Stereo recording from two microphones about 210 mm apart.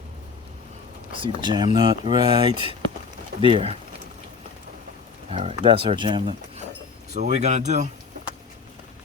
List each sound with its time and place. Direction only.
1.1 s speech: 25° right (ahead or behind)
5.3 s speech: 30° right (ahead or behind)
7.1 s speech: 35° right (ahead or behind)